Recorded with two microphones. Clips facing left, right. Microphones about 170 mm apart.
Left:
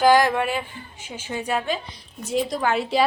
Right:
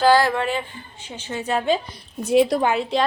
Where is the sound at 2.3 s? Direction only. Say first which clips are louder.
Right 7 dB; 60° right (ahead or behind).